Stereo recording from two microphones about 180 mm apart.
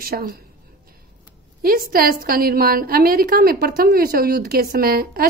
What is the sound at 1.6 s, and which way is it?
A woman's voice, 55° right (ahead or behind).